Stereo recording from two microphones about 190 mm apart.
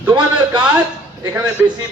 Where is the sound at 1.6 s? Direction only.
10° right (ahead or behind).